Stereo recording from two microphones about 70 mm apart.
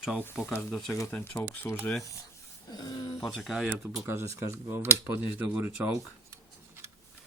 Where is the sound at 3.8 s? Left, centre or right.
Right.